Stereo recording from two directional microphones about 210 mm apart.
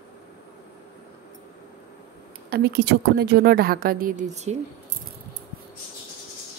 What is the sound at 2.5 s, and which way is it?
A woman's voice, 50° right (ahead or behind).